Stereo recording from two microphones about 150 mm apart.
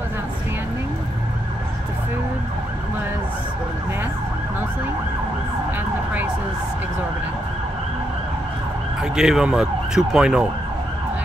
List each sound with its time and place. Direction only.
9.0 s speech: 5° right (ahead or behind)